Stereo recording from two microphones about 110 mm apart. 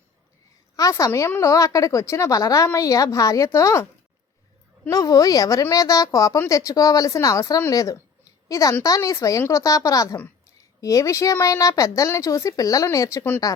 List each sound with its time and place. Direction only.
0.8 s a woman's voice: 30° left (ahead or behind)
4.9 s a woman's voice: 30° left (ahead or behind)
13.1 s speech: 15° left (ahead or behind)